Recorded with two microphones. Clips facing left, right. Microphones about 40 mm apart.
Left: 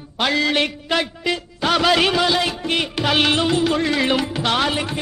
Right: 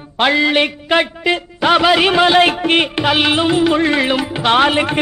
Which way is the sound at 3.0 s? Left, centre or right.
Centre.